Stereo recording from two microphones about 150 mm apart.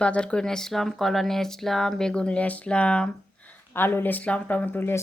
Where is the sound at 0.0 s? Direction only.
5° left (ahead or behind).